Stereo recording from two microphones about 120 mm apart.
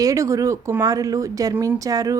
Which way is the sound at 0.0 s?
25° right (ahead or behind).